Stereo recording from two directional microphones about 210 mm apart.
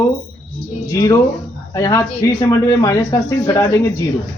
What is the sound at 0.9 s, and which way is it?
Speech, 15° left (ahead or behind).